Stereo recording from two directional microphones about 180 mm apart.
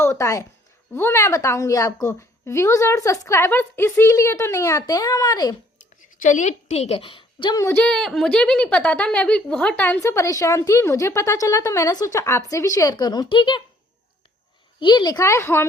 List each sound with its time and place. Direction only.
0.0 s a woman's voice: 15° left (ahead or behind)
6.2 s a woman's voice: 45° left (ahead or behind); by 7.6 s 25° left (ahead or behind)
7.6 s a woman's voice: 10° left (ahead or behind); by 13.6 s 25° left (ahead or behind)
14.8 s a woman's voice: 25° left (ahead or behind)